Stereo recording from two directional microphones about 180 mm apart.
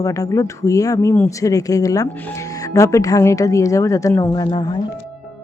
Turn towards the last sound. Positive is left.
turn(degrees=20)  # may be behind; listen again after turning